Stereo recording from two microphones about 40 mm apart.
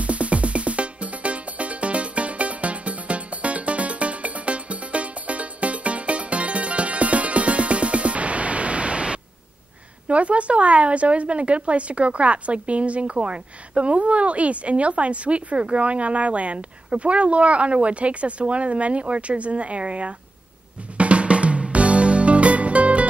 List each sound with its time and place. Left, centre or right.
0.0 s music: right
10.0 s a woman's voice: right
21.0 s music: right